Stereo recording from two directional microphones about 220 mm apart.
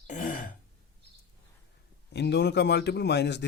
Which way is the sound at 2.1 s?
50° left (ahead or behind).